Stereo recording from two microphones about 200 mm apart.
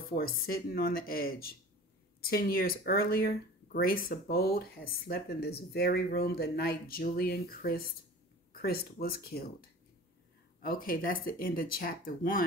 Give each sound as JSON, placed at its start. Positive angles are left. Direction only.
{"t": 0.1, "sound": "speech", "side_deg": 50}
{"t": 10.6, "sound": "speech", "side_deg": 45}